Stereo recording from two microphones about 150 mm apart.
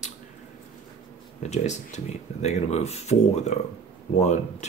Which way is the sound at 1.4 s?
50° left (ahead or behind).